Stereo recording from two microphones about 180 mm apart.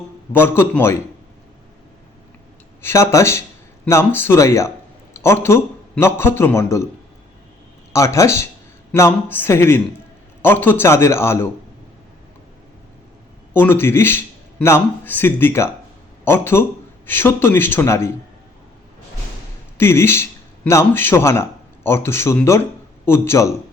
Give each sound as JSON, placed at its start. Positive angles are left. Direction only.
{"t": 0.3, "sound": "speech", "side_deg": 10}
{"t": 2.8, "sound": "a man's voice", "side_deg": 15}
{"t": 7.9, "sound": "speech", "side_deg": 15}
{"t": 13.5, "sound": "speech", "side_deg": 10}
{"t": 19.7, "sound": "speech", "side_deg": 15}